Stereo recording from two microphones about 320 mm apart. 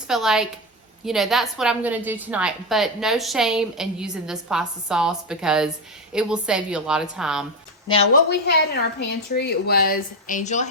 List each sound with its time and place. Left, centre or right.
0.1 s a woman's voice: centre
8.4 s a woman's voice: left